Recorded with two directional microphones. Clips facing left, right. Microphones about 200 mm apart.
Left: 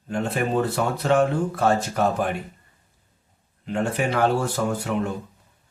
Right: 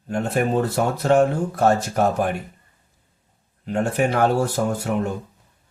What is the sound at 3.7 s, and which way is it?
Speech, 45° right (ahead or behind).